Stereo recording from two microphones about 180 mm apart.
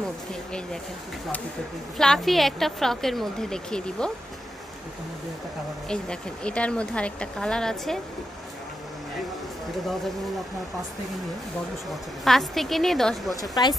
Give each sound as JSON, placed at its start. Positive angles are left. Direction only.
{"t": 2.0, "sound": "a woman's voice", "side_deg": 0}
{"t": 5.9, "sound": "a woman's voice", "side_deg": 5}
{"t": 12.3, "sound": "a woman's voice", "side_deg": 0}
{"t": 13.4, "sound": "speech", "side_deg": 25}